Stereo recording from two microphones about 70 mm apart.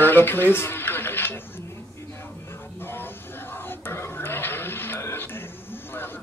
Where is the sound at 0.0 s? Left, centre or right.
Left.